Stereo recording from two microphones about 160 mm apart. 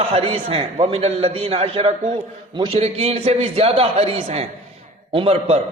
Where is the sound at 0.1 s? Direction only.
40° right (ahead or behind).